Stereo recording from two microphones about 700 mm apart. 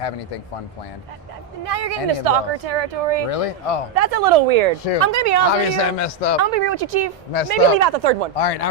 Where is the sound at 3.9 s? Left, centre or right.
Right.